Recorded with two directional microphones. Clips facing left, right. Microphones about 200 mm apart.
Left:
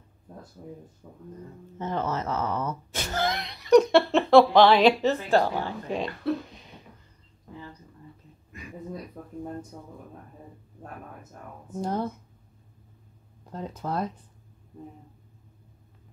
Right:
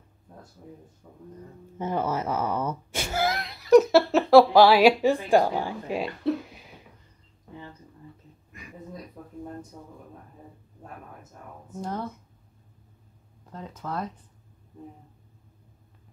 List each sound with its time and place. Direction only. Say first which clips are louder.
1.8 s speech: right 2 dB; 10° right (ahead or behind)
13.5 s speech: left 3 dB; 35° left (ahead or behind)